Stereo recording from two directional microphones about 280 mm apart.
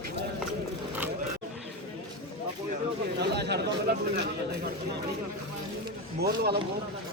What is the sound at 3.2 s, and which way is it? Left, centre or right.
A man's voice, right.